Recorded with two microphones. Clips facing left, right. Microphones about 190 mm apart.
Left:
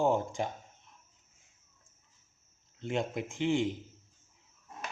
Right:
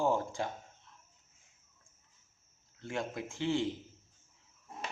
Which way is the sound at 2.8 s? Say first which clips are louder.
Left 4 dB; 20° left (ahead or behind).